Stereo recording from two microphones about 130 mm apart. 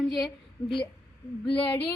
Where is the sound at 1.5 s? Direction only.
10° left (ahead or behind).